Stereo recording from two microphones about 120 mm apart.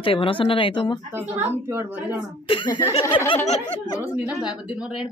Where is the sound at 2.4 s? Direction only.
45° left (ahead or behind).